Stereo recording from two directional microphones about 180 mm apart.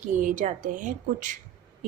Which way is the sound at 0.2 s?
45° right (ahead or behind).